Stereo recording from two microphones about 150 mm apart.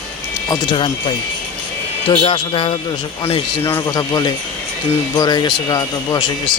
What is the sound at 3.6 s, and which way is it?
Speech, 20° left (ahead or behind).